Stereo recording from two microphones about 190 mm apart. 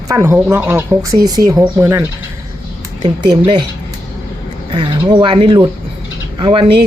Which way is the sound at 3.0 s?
25° right (ahead or behind).